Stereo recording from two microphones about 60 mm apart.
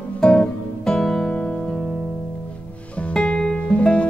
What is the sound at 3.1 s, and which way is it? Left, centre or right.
Music, centre.